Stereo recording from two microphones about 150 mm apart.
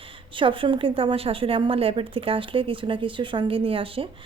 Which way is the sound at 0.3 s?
35° right (ahead or behind).